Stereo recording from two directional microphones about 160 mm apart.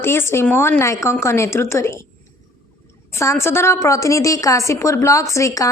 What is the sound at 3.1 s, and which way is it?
A woman's voice, 20° left (ahead or behind).